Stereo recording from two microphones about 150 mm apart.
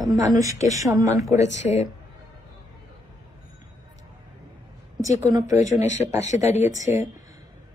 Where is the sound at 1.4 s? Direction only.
50° left (ahead or behind).